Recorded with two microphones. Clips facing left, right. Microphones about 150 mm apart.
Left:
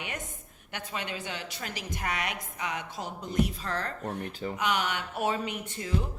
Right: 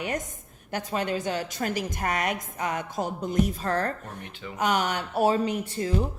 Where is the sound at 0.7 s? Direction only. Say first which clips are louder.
Right 8 dB; 40° right (ahead or behind).